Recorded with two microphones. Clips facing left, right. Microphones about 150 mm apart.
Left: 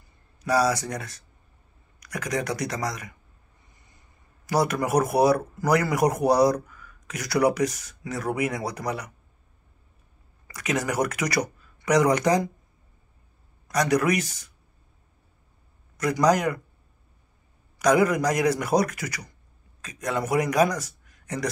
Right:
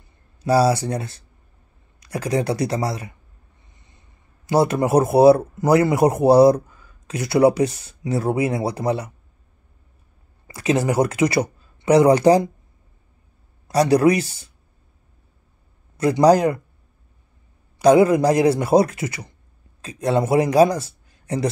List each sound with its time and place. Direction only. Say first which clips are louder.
0.4 s speech: right 6 dB; 30° right (ahead or behind)
3.7 s a sound: right 3 dB; 25° right (ahead or behind)
4.5 s speech: right 6 dB; 25° right (ahead or behind)
10.5 s speech: right 7 dB; 30° right (ahead or behind)
13.7 s speech: right 7 dB; 30° right (ahead or behind)
16.0 s speech: right 7 dB; 30° right (ahead or behind)
17.7 s a man's voice: right 7 dB; 30° right (ahead or behind)